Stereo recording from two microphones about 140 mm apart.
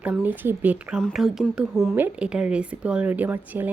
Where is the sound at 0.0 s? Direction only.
10° right (ahead or behind).